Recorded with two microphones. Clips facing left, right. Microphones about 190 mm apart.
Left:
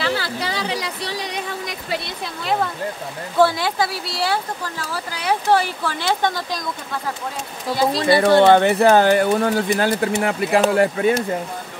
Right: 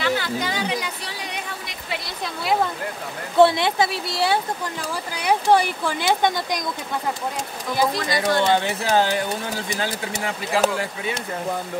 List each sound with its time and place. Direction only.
0.0 s a sound: 35° left (ahead or behind)
3.3 s speech: 25° right (ahead or behind)
8.1 s speech: 60° left (ahead or behind)